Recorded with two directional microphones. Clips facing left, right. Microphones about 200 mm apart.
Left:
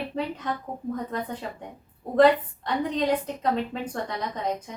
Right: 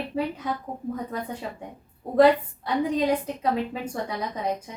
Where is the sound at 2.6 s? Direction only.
10° right (ahead or behind).